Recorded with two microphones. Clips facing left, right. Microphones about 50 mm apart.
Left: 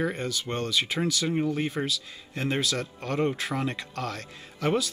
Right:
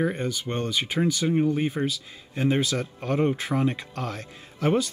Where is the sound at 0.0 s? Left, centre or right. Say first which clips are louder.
Right 3 dB; centre.